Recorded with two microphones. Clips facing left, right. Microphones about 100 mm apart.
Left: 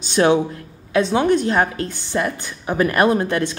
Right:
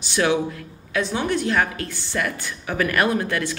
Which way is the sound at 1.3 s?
20° left (ahead or behind).